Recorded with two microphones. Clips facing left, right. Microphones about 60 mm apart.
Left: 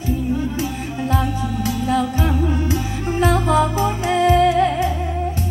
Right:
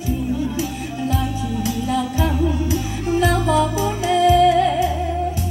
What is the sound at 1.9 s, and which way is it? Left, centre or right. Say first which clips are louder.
Music: left 2 dB; left.